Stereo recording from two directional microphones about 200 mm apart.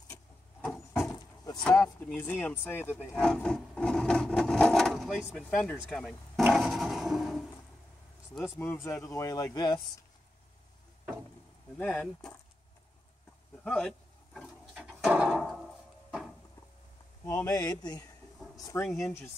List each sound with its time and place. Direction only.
1.1 s vehicle: 20° left (ahead or behind)
1.8 s speech: 10° left (ahead or behind)
6.4 s wood: centre (ahead or behind)
8.4 s speech: 10° left (ahead or behind)
11.8 s speech: 5° left (ahead or behind)
13.7 s a sound: 5° left (ahead or behind)
17.2 s speech: 15° left (ahead or behind)
18.9 s speech: centre (ahead or behind)